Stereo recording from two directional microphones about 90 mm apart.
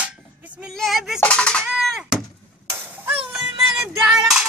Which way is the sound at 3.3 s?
5° right (ahead or behind).